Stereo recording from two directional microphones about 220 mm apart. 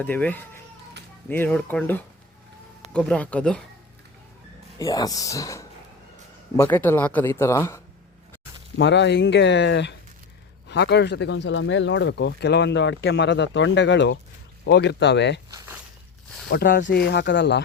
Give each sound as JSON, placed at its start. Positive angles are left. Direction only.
{"t": 0.0, "sound": "speech", "side_deg": 10}
{"t": 4.8, "sound": "speech", "side_deg": 15}
{"t": 8.8, "sound": "speech", "side_deg": 50}
{"t": 15.5, "sound": "walk", "side_deg": -10}
{"t": 16.5, "sound": "speech", "side_deg": 45}